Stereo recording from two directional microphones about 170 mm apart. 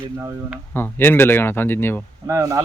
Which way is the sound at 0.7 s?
10° left (ahead or behind).